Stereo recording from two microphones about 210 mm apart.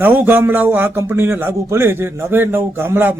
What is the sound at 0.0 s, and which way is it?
Speech, 10° right (ahead or behind).